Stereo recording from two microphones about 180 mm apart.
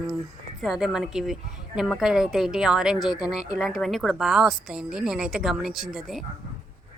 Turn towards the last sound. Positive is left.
turn(degrees=0)  # may be behind; listen again after turning